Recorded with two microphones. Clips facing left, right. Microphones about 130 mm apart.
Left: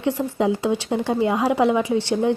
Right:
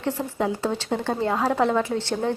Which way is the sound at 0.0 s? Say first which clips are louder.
Left 4 dB; 15° left (ahead or behind).